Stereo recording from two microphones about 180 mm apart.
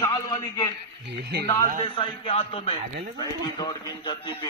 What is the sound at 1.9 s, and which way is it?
A man's voice, 25° left (ahead or behind).